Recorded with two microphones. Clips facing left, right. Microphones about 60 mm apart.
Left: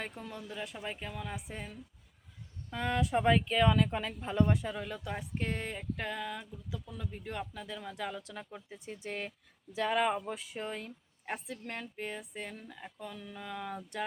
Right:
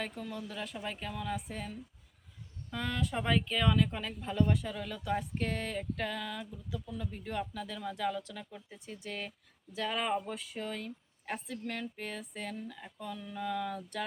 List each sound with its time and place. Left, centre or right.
0.0 s speech: centre
6.4 s speech: centre